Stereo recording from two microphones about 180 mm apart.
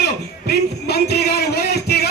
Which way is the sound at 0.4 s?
65° left (ahead or behind).